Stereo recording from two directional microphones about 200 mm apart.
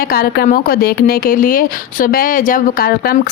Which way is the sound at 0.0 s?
50° left (ahead or behind).